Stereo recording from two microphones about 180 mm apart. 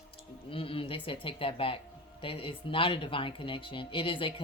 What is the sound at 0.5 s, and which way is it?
A woman's voice, 30° left (ahead or behind).